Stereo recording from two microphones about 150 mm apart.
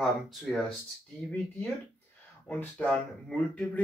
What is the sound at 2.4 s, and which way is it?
Speech, 5° left (ahead or behind).